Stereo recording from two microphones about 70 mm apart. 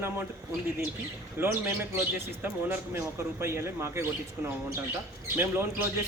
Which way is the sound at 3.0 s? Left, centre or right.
Right.